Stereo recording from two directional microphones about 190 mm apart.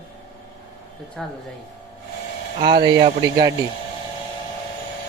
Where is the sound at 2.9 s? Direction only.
25° right (ahead or behind).